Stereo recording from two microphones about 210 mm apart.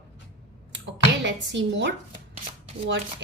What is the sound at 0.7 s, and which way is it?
Speech, 60° right (ahead or behind).